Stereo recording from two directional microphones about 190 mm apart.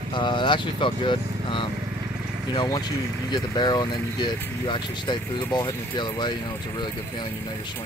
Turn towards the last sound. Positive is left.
turn(degrees=25)  # may be behind; listen again after turning